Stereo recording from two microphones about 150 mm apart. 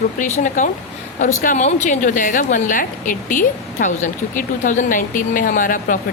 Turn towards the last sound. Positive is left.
turn(degrees=65)  # may be behind; listen again after turning